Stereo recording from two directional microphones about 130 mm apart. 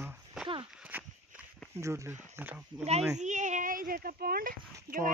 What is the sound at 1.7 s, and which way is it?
Speech, 20° right (ahead or behind).